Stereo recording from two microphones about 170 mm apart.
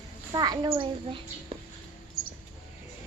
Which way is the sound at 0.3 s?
25° right (ahead or behind).